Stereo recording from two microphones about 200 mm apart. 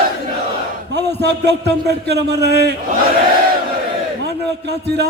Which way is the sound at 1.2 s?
60° right (ahead or behind).